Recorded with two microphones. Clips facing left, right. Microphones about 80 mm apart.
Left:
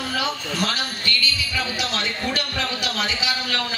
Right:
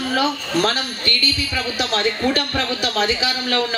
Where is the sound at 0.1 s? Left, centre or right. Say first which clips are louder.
Right 8 dB; right.